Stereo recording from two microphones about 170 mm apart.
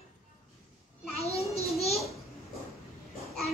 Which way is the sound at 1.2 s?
35° left (ahead or behind).